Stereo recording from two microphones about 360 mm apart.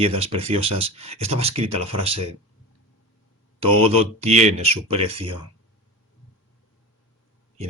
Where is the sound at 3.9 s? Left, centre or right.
Centre.